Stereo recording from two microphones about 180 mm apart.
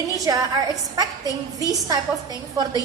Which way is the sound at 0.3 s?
20° right (ahead or behind).